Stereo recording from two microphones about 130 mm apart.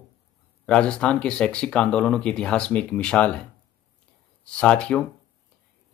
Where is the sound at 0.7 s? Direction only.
5° left (ahead or behind).